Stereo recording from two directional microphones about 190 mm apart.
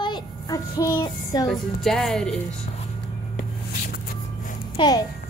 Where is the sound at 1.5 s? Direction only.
Centre (ahead or behind).